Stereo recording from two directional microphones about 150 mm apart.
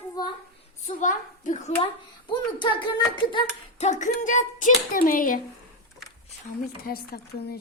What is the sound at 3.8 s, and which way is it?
Speech, 55° left (ahead or behind).